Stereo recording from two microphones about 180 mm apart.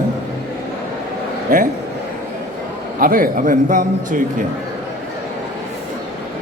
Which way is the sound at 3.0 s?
50° right (ahead or behind).